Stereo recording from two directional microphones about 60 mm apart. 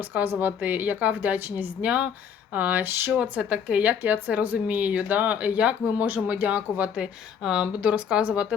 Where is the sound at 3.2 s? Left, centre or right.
Centre.